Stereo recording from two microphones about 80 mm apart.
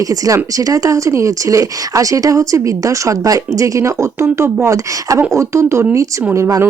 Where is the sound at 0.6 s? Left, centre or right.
Right.